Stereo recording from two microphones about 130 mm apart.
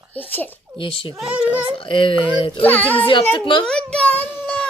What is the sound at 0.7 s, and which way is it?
Speech, 40° left (ahead or behind).